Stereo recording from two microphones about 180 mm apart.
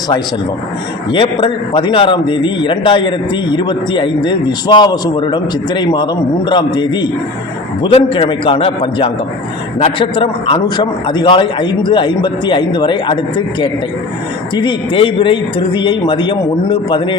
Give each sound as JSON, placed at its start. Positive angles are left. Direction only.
{"t": 1.1, "sound": "a man's voice", "side_deg": 25}